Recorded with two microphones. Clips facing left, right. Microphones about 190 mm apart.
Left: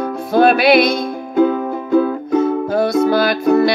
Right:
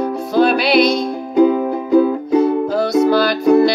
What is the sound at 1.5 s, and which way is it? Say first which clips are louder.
Music: right 2 dB; 10° right (ahead or behind).